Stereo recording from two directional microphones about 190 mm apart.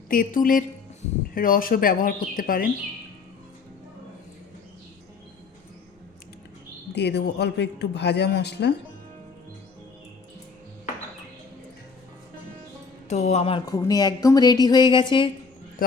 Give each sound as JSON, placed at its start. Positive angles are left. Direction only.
{"t": 0.1, "sound": "speech", "side_deg": 45}
{"t": 6.9, "sound": "speech", "side_deg": 60}
{"t": 13.1, "sound": "speech", "side_deg": 35}